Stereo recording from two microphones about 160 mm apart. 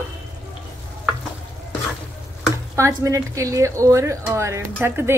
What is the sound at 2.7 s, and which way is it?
A woman's voice, 20° right (ahead or behind).